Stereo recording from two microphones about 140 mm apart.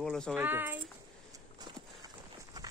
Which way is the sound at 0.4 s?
15° right (ahead or behind).